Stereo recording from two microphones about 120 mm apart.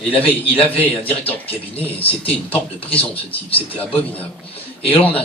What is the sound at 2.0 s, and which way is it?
Speech, 50° left (ahead or behind).